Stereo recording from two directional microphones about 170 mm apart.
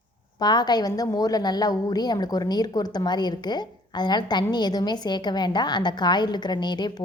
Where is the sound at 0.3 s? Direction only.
25° left (ahead or behind).